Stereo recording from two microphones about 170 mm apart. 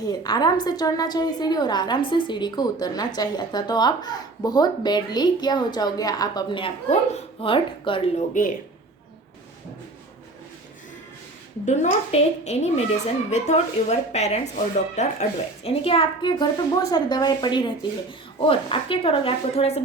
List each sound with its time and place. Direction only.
0.0 s a woman's voice: 25° left (ahead or behind); by 8.5 s 50° left (ahead or behind)
11.6 s a woman's voice: 40° left (ahead or behind)